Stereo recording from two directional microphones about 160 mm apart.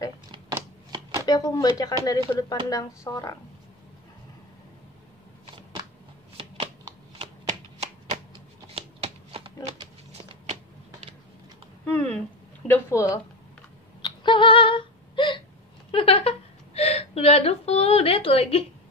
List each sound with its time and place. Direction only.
1.2 s speech: 25° left (ahead or behind)
6.3 s a sound: 35° right (ahead or behind)
7.4 s shuffling cards: 50° right (ahead or behind)
8.7 s shuffling cards: 35° right (ahead or behind)
9.8 s a sound: 35° right (ahead or behind)
11.8 s a sound: 10° left (ahead or behind)
12.6 s speech: 15° left (ahead or behind)
14.0 s hiccup: 30° left (ahead or behind)
15.9 s whimper: 35° left (ahead or behind)